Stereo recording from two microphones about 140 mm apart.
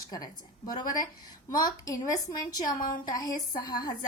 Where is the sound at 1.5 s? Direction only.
25° left (ahead or behind).